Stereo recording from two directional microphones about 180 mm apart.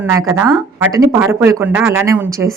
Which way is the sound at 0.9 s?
15° right (ahead or behind).